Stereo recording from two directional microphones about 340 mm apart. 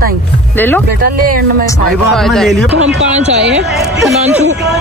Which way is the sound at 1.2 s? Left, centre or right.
Right.